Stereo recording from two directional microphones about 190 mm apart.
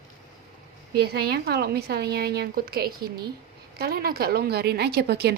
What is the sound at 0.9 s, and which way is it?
A woman's voice, 55° right (ahead or behind).